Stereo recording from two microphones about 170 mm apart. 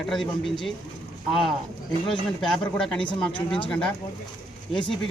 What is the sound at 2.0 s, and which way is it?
Speech, centre (ahead or behind).